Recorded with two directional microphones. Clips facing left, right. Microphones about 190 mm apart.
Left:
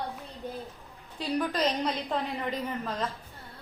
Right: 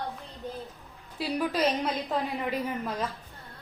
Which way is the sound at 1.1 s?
5° right (ahead or behind).